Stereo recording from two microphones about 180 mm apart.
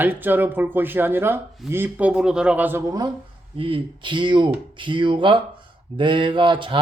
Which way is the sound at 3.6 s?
30° right (ahead or behind).